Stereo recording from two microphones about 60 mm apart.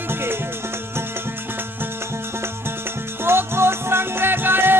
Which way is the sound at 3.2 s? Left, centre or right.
Right.